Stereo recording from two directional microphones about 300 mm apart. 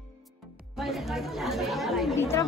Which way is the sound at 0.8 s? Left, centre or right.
Centre.